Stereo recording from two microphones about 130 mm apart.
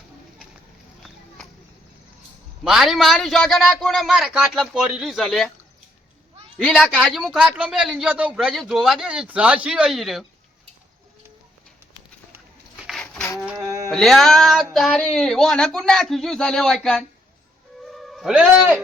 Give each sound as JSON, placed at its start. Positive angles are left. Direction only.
{"t": 2.6, "sound": "a man's voice", "side_deg": -5}
{"t": 6.6, "sound": "speech", "side_deg": 5}
{"t": 6.9, "sound": "a man's voice", "side_deg": -5}
{"t": 12.9, "sound": "a sound", "side_deg": 5}
{"t": 13.6, "sound": "music", "side_deg": -25}
{"t": 13.9, "sound": "a man's voice", "side_deg": 5}
{"t": 17.8, "sound": "a sound", "side_deg": 0}